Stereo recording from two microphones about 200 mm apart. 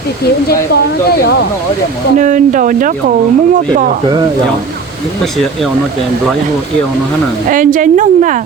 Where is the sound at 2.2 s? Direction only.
40° right (ahead or behind).